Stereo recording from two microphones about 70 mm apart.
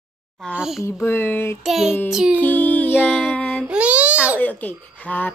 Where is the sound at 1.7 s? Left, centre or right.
Centre.